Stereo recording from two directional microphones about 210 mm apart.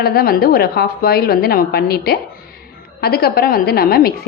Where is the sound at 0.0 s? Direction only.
45° left (ahead or behind).